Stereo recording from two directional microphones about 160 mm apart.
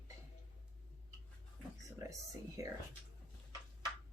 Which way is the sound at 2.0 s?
20° right (ahead or behind).